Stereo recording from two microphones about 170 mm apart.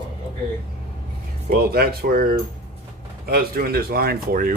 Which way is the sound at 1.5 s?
65° right (ahead or behind).